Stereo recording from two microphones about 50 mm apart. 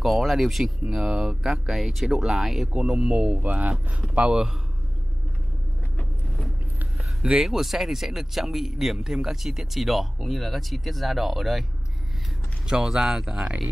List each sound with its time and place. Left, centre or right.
0.2 s speech: centre
2.9 s speech: centre
3.4 s speech: right
4.2 s speech: centre
7.0 s speech: centre
12.6 s speech: centre